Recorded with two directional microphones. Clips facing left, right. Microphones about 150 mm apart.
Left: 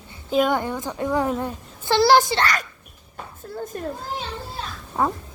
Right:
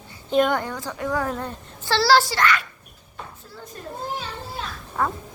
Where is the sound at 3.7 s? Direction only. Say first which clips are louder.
Left 7 dB; 55° left (ahead or behind).